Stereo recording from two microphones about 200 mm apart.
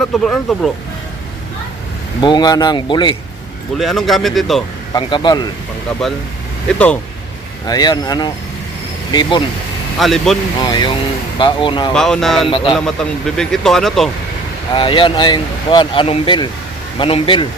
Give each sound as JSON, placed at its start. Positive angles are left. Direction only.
{"t": 0.0, "sound": "speech", "side_deg": 0}
{"t": 2.2, "sound": "speech", "side_deg": 20}
{"t": 3.8, "sound": "speech", "side_deg": 0}
{"t": 4.9, "sound": "speech", "side_deg": 20}
{"t": 6.0, "sound": "speech", "side_deg": 0}
{"t": 7.7, "sound": "speech", "side_deg": 20}
{"t": 10.0, "sound": "speech", "side_deg": 0}
{"t": 10.6, "sound": "speech", "side_deg": 20}
{"t": 11.9, "sound": "speech", "side_deg": 0}
{"t": 12.5, "sound": "speech", "side_deg": 25}
{"t": 12.7, "sound": "speech", "side_deg": 0}
{"t": 14.8, "sound": "speech", "side_deg": 25}